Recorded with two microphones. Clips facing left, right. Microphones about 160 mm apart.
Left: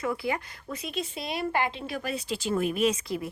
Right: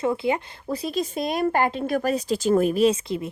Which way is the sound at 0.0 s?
25° right (ahead or behind).